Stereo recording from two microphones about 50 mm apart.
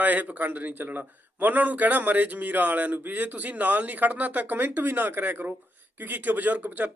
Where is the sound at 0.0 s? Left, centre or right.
Right.